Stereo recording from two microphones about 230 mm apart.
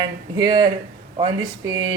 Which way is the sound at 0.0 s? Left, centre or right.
Centre.